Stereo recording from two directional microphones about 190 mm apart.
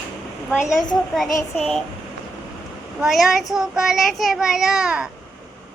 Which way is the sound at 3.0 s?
Centre (ahead or behind).